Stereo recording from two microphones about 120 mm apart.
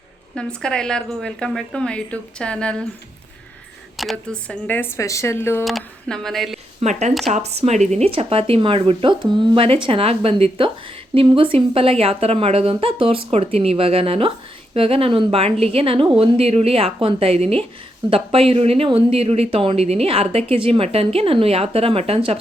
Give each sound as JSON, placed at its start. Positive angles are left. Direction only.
{"t": 0.3, "sound": "a woman's voice", "side_deg": 5}
{"t": 3.9, "sound": "speech", "side_deg": 0}
{"t": 5.6, "sound": "speech", "side_deg": 0}
{"t": 6.8, "sound": "speech", "side_deg": -60}
{"t": 7.3, "sound": "speech", "side_deg": -75}